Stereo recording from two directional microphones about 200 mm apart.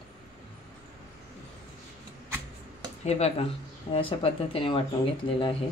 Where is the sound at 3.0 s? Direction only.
30° left (ahead or behind).